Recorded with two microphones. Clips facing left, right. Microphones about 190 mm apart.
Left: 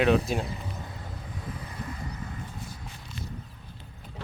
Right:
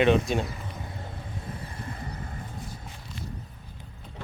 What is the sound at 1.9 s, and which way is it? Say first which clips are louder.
Vehicle: even; 50° right (ahead or behind).